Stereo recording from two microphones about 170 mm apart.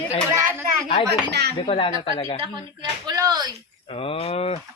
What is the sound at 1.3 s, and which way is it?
Speech, 75° right (ahead or behind).